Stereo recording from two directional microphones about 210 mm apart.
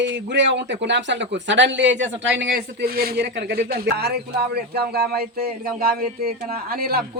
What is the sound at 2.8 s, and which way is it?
Speech, 45° right (ahead or behind).